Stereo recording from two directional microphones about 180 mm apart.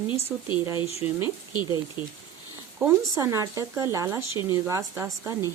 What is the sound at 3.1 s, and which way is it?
Speech, 15° right (ahead or behind).